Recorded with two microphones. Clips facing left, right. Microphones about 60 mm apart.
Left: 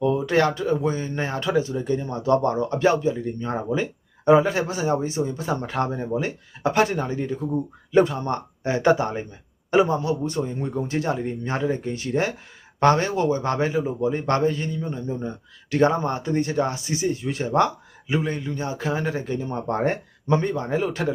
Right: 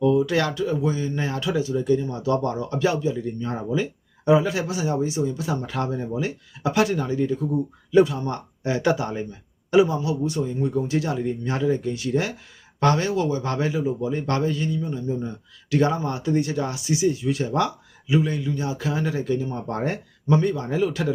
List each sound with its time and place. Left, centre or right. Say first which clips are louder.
0.0 s speech: even; left